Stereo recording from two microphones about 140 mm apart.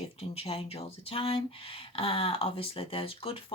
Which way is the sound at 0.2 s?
45° left (ahead or behind).